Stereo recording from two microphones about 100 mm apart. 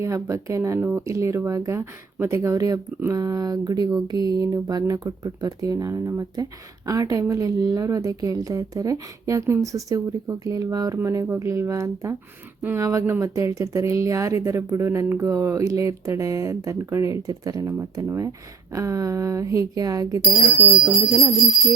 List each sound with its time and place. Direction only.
0.0 s speech: 30° right (ahead or behind)